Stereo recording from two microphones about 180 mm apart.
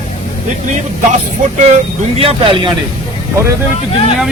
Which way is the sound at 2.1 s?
30° right (ahead or behind).